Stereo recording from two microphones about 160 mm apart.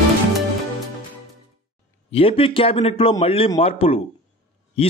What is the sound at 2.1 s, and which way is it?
A man's voice, 35° left (ahead or behind).